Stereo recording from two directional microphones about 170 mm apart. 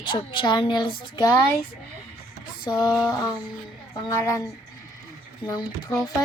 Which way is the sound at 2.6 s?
25° left (ahead or behind).